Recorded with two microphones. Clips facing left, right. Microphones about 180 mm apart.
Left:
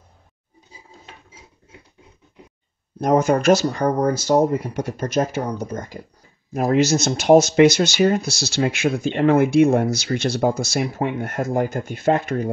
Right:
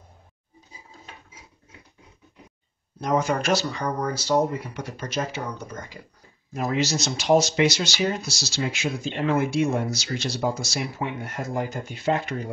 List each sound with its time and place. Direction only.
3.0 s speech: 45° left (ahead or behind)